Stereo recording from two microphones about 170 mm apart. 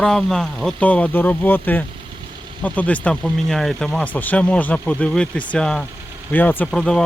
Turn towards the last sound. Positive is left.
turn(degrees=5)  # may be behind; listen again after turning